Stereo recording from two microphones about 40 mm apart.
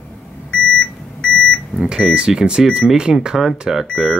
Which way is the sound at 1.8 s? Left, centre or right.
Centre.